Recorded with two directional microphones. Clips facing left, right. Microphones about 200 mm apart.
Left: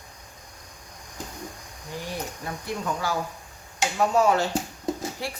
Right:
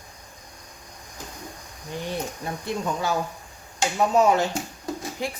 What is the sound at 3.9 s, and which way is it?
Speech, 20° right (ahead or behind).